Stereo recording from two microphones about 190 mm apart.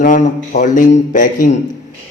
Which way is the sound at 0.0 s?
45° left (ahead or behind).